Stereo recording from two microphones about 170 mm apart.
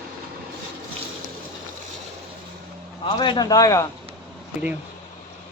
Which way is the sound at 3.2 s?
25° left (ahead or behind).